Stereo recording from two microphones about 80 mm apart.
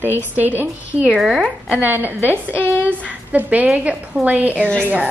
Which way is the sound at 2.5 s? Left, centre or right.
Left.